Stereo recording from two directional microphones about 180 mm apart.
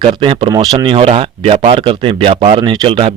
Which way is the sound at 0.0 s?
30° right (ahead or behind).